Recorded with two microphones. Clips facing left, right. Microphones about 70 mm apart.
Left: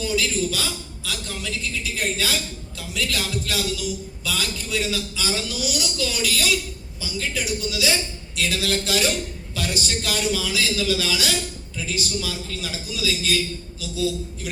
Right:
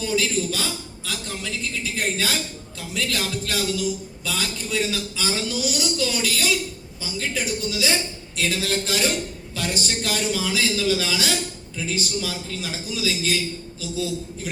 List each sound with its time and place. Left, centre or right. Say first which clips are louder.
0.0 s a man's voice: even; right